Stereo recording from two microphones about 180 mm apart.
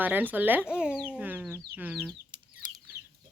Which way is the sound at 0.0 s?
10° right (ahead or behind).